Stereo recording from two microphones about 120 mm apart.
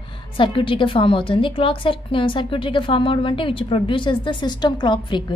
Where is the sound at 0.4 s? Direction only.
45° left (ahead or behind).